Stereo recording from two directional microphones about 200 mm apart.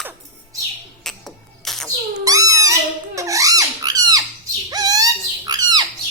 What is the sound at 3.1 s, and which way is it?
Squeak, 15° right (ahead or behind).